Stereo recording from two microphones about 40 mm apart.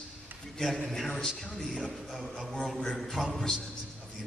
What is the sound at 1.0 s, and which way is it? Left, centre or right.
A man's voice, centre.